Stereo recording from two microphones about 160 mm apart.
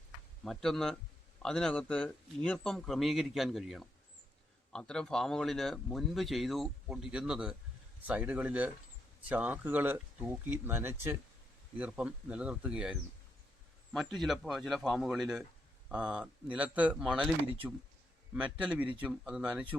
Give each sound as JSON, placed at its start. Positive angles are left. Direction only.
{"t": 0.4, "sound": "speech", "side_deg": 0}